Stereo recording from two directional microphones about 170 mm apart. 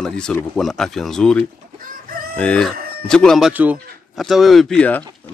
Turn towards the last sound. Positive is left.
turn(degrees=10)  # may be behind; listen again after turning